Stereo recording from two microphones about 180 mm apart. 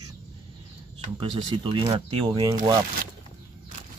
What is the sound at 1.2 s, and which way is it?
Speech, 25° right (ahead or behind).